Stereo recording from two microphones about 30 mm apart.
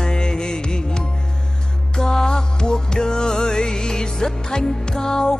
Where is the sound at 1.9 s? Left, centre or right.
Left.